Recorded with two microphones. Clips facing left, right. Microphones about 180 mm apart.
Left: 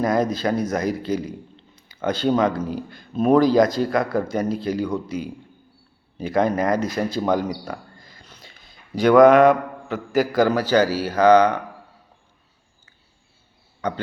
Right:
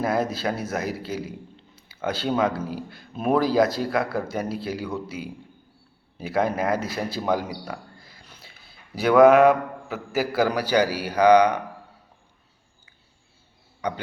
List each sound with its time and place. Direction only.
0.0 s a man's voice: 5° right (ahead or behind)
13.8 s a man's voice: 10° right (ahead or behind)